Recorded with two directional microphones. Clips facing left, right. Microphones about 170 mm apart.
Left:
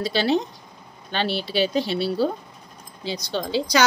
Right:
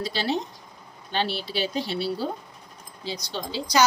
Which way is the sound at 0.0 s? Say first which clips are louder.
Left 6 dB; 70° left (ahead or behind).